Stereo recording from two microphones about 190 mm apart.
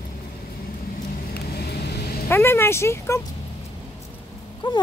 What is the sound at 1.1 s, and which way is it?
Vehicle, 55° left (ahead or behind).